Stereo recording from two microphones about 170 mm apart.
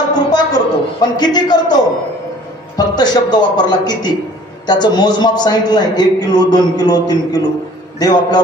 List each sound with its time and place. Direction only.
0.1 s a sound: 25° left (ahead or behind)
1.1 s a man's voice: 25° left (ahead or behind)
2.8 s a man's voice: 25° left (ahead or behind)